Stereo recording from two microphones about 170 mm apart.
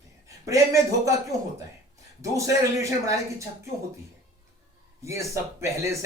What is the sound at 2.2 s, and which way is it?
Speech, 20° right (ahead or behind).